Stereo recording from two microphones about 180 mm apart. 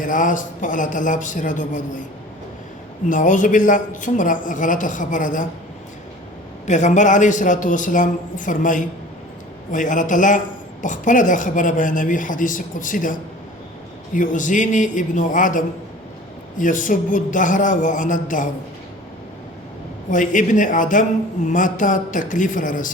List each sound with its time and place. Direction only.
0.0 s a man's voice: 45° left (ahead or behind)
3.1 s a man's voice: 45° left (ahead or behind)
6.7 s a man's voice: 40° left (ahead or behind)
20.1 s a man's voice: 45° left (ahead or behind)